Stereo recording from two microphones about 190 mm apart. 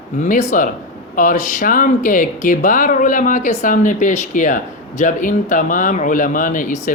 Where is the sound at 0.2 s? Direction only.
40° left (ahead or behind).